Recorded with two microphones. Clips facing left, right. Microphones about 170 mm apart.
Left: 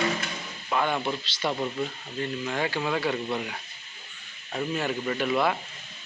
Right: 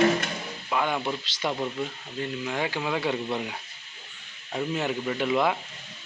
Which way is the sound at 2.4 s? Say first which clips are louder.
Left 1 dB; 10° right (ahead or behind).